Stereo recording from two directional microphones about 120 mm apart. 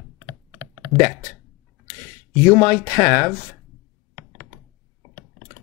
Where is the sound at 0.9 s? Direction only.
20° left (ahead or behind).